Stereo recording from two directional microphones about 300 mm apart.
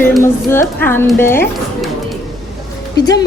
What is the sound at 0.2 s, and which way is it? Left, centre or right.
A woman's voice, centre.